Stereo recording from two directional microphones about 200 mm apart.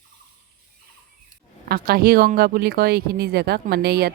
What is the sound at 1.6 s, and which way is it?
Speech, 50° right (ahead or behind).